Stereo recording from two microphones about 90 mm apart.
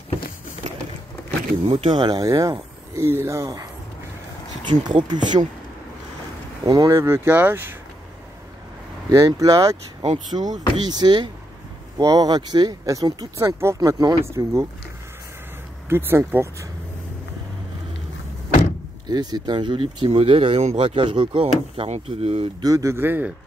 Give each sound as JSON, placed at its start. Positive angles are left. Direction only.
{"t": 1.7, "sound": "speech", "side_deg": -90}
{"t": 2.0, "sound": "speech", "side_deg": -45}
{"t": 3.0, "sound": "speech", "side_deg": -30}
{"t": 4.6, "sound": "speech", "side_deg": -55}
{"t": 6.6, "sound": "speech", "side_deg": -45}
{"t": 6.9, "sound": "speech", "side_deg": -30}
{"t": 9.1, "sound": "speech", "side_deg": -40}
{"t": 10.1, "sound": "speech", "side_deg": -55}
{"t": 13.4, "sound": "speech", "side_deg": -30}
{"t": 13.7, "sound": "speech", "side_deg": -45}
{"t": 15.9, "sound": "speech", "side_deg": -25}
{"t": 19.0, "sound": "speech", "side_deg": -50}
{"t": 22.6, "sound": "speech", "side_deg": -40}
{"t": 22.9, "sound": "speech", "side_deg": -20}